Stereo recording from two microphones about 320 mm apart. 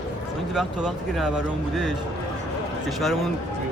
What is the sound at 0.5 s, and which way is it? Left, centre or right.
Speech, centre.